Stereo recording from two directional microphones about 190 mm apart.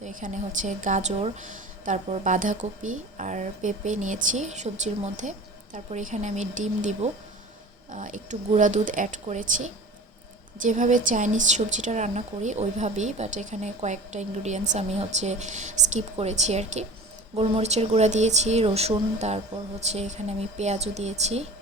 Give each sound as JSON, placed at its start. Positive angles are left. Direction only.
{"t": 0.0, "sound": "a woman's voice", "side_deg": -40}